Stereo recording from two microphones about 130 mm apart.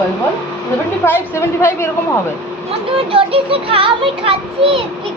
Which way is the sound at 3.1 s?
45° right (ahead or behind).